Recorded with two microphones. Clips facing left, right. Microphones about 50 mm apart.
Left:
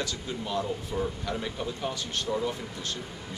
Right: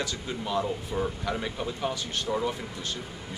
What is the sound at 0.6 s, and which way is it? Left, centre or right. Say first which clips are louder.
Speech: right 1 dB; centre.